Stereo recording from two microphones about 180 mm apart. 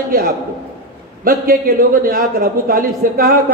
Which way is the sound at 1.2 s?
50° right (ahead or behind).